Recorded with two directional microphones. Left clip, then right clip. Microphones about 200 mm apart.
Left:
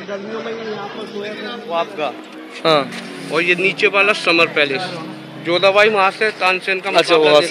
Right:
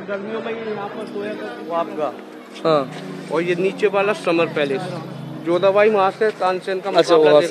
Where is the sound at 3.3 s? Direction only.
40° right (ahead or behind).